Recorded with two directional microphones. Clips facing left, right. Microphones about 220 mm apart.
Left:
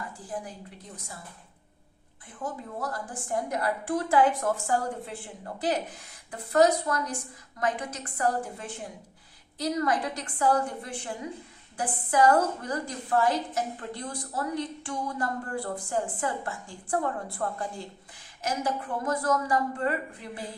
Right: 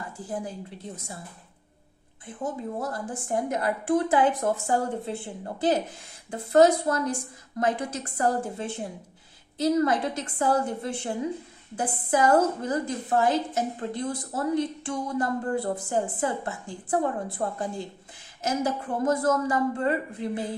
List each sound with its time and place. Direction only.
2.2 s a woman's voice: 25° right (ahead or behind)